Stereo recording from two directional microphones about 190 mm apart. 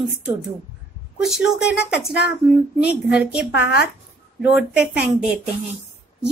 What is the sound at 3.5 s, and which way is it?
Speech, 60° left (ahead or behind).